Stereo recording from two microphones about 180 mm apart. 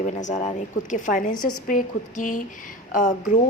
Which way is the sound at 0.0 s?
40° left (ahead or behind).